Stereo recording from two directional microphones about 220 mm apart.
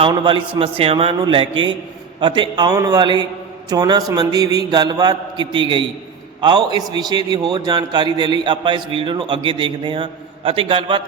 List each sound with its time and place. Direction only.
0.0 s a man's voice: 25° right (ahead or behind)